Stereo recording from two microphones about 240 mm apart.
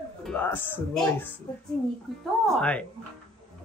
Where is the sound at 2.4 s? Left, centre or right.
Centre.